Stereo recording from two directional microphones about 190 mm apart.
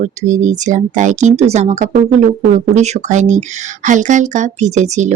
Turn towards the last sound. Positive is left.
turn(degrees=-35)  # may be behind; listen again after turning